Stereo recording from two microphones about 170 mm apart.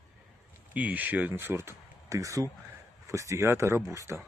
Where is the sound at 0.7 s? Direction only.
10° right (ahead or behind).